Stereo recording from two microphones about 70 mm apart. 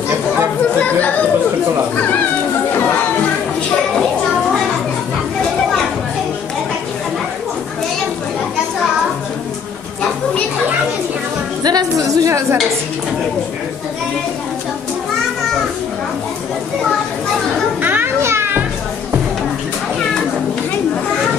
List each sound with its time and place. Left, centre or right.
11.6 s a sound: right
12.3 s speech: right
17.8 s children playing: right